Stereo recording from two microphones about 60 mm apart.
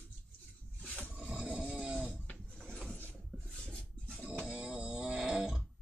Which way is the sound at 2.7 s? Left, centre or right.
Centre.